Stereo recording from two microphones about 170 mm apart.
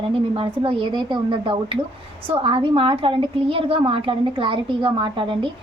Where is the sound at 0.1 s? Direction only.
30° right (ahead or behind).